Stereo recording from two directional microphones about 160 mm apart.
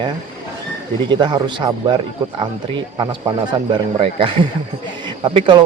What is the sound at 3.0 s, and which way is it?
Speech, 30° right (ahead or behind).